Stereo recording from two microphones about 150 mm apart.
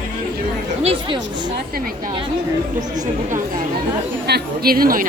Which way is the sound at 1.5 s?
90° right.